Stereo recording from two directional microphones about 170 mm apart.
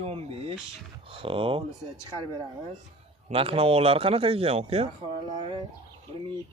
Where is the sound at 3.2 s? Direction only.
35° right (ahead or behind).